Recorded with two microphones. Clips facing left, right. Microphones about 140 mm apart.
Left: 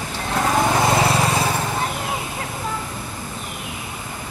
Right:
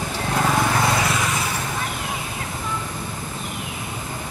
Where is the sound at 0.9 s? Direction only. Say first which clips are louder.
Left 4 dB; 30° left (ahead or behind).